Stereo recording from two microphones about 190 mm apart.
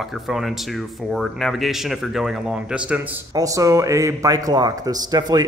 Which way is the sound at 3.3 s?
15° right (ahead or behind).